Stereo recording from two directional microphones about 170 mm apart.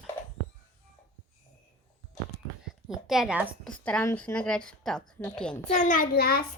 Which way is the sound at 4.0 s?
15° left (ahead or behind).